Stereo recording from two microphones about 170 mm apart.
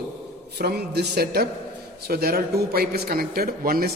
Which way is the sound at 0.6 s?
70° right (ahead or behind).